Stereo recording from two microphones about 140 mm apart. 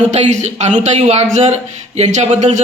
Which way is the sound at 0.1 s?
55° right (ahead or behind).